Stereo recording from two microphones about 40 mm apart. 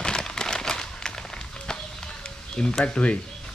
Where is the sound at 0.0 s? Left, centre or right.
Centre.